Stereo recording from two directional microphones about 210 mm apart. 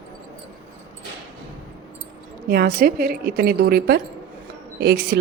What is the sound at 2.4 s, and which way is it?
A woman's voice, 45° right (ahead or behind).